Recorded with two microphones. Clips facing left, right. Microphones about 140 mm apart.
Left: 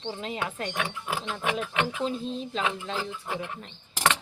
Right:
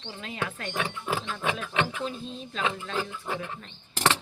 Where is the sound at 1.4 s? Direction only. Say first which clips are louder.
Left 2 dB; 30° right (ahead or behind).